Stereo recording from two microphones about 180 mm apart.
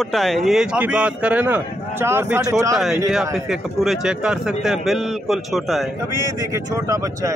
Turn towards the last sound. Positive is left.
turn(degrees=-15)  # may be behind; listen again after turning